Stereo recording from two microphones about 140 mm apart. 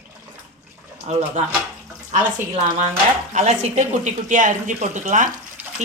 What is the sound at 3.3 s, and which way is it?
Speech, 60° right (ahead or behind).